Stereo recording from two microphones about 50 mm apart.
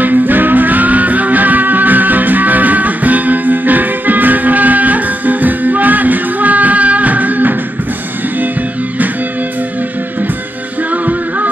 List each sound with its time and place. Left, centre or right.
0.0 s music: right
10.9 s music: right